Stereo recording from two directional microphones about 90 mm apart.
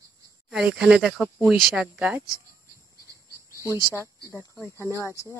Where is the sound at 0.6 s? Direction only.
10° right (ahead or behind).